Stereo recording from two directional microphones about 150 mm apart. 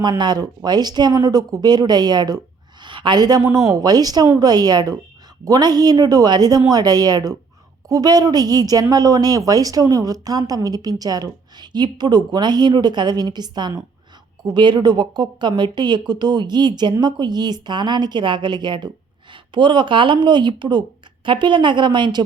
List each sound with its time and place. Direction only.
0.0 s a woman's voice: 30° right (ahead or behind)